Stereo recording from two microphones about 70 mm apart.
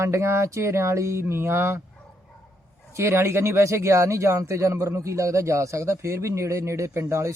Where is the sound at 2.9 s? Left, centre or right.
Right.